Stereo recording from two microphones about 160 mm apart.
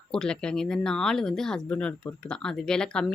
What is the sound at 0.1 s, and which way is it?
Speech, 5° left (ahead or behind).